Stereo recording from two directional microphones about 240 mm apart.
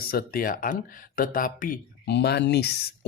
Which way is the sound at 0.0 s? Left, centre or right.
Left.